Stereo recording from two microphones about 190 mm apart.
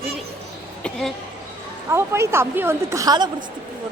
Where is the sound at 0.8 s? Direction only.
5° left (ahead or behind).